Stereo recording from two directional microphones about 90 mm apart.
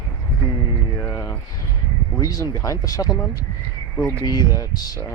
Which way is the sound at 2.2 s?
40° left (ahead or behind).